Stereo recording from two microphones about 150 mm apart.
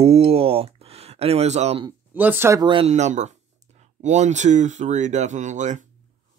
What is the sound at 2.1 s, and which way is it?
Speech, 15° right (ahead or behind).